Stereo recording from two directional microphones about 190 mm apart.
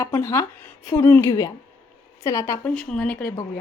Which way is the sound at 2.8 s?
5° left (ahead or behind).